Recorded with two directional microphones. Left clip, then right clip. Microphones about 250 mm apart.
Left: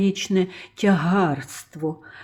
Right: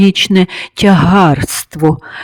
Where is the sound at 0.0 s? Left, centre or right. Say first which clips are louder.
Right 12 dB; right.